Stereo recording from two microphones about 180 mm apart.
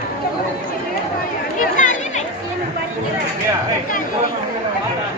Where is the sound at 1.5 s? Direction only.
45° left (ahead or behind).